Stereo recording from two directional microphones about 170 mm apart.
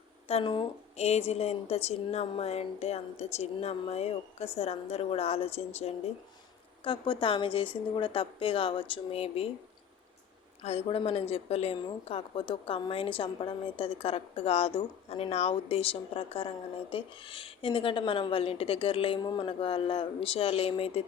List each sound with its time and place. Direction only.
0.3 s a woman's voice: 35° left (ahead or behind)
10.6 s a woman's voice: 35° left (ahead or behind)